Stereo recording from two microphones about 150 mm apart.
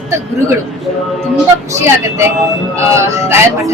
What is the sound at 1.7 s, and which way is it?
Speech, 20° right (ahead or behind).